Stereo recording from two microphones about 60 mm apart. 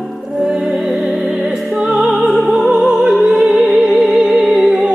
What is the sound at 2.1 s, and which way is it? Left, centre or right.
Music, centre.